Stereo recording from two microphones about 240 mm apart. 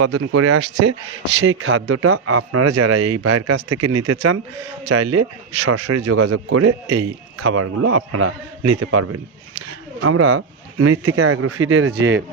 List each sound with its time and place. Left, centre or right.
0.0 s speech: right
1.4 s a man's voice: right
4.9 s speech: right
5.6 s a man's voice: right
9.6 s speech: right